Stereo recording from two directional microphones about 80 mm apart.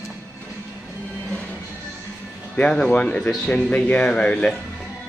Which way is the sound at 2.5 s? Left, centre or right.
Centre.